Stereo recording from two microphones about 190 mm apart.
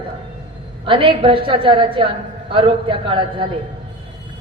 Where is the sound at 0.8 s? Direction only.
25° right (ahead or behind).